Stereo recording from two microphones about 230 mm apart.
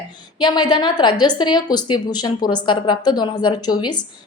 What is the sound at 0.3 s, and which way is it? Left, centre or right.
A woman's voice, centre.